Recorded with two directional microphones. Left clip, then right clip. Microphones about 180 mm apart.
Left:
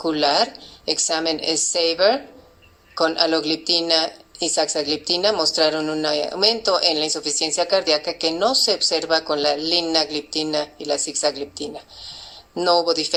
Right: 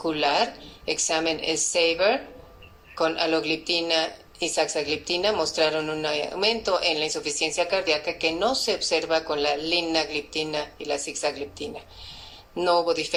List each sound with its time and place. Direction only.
0.0 s a woman's voice: 50° left (ahead or behind)